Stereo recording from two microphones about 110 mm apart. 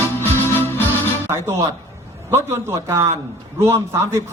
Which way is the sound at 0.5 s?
20° left (ahead or behind).